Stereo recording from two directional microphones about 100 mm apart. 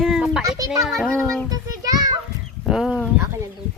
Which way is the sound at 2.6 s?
Centre (ahead or behind).